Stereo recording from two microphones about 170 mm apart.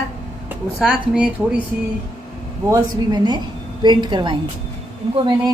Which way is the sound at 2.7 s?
25° right (ahead or behind).